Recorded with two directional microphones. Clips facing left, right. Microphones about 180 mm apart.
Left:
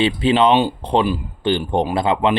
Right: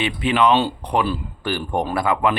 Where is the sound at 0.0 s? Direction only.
30° left (ahead or behind).